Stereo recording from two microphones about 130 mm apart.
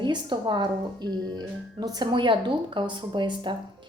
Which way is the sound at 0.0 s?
35° right (ahead or behind).